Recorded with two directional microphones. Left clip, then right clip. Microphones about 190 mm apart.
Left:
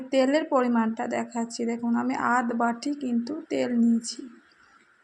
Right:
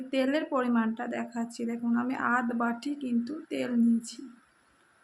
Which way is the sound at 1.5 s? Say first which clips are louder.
Left 3 dB; 20° left (ahead or behind).